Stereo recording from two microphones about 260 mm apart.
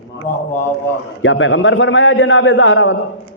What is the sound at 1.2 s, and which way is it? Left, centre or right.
A man's voice, left.